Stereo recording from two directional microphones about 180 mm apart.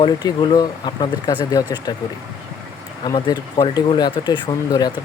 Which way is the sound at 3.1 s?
25° left (ahead or behind).